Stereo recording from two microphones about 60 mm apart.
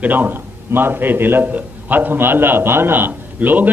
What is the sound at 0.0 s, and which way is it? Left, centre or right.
A man's voice, right.